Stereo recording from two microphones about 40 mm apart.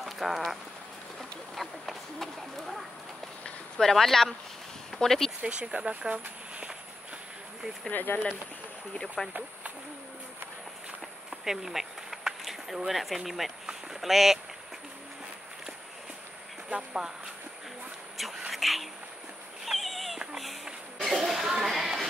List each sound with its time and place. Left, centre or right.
0.0 s speech: centre
5.4 s speech: right
7.9 s speech: left
9.2 s speech: centre
11.2 s insect: centre
12.7 s speech: centre
18.1 s insect: centre
18.5 s vehicle: centre
19.6 s cat: centre
20.3 s a sound: centre